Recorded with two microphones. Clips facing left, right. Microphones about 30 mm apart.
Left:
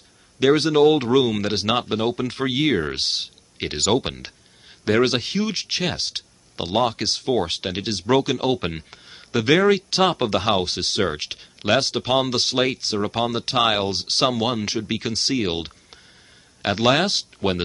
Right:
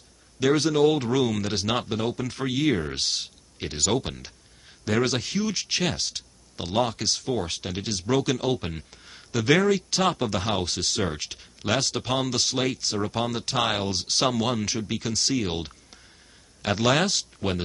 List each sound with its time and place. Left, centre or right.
0.6 s speech: left
3.5 s speech: left
5.7 s speech: centre
6.1 s a sound: left
7.0 s speech: left
8.1 s speech: centre
8.5 s speech: left
9.0 s a sound: left
9.7 s speech: left
14.9 s speech: left